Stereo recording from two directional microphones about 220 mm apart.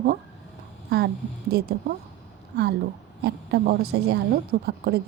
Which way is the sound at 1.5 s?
45° right (ahead or behind).